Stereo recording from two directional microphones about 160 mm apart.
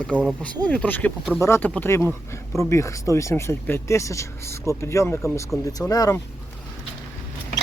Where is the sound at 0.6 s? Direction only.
10° left (ahead or behind).